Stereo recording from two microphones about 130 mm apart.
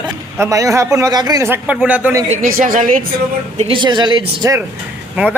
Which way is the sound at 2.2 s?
90° right.